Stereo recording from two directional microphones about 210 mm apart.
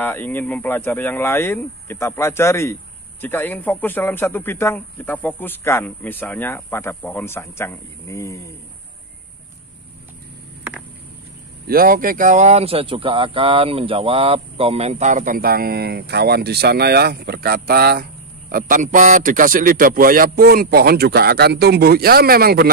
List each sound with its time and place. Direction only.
0.0 s speech: 10° left (ahead or behind)
11.6 s a man's voice: 45° right (ahead or behind)